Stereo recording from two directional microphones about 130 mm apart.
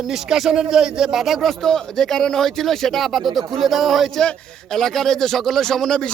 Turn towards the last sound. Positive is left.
turn(degrees=5)  # may be behind; listen again after turning